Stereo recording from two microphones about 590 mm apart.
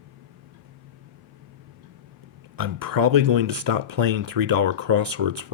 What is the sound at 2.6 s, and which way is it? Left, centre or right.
Speech, right.